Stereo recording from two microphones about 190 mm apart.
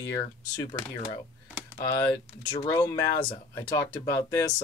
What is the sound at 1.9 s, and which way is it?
Speech, 15° left (ahead or behind).